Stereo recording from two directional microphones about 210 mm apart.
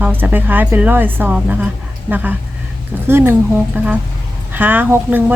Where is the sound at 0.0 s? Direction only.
10° right (ahead or behind).